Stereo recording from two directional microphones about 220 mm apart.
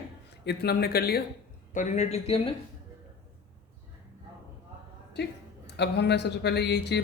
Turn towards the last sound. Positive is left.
turn(degrees=50)  # may be behind; listen again after turning